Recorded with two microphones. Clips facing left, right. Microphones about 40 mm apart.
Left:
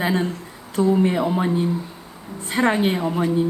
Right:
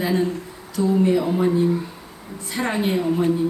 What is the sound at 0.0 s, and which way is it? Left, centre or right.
A woman's voice, left.